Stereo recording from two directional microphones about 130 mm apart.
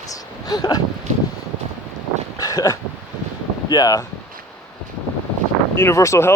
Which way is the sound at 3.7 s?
30° left (ahead or behind).